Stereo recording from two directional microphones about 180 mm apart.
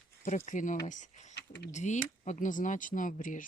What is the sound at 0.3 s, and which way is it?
Speech, 45° left (ahead or behind).